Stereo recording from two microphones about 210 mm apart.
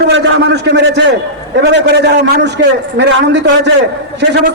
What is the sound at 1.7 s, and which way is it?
A man's voice, 55° right (ahead or behind).